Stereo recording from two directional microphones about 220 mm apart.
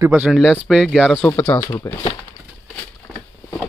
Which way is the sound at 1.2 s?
10° left (ahead or behind).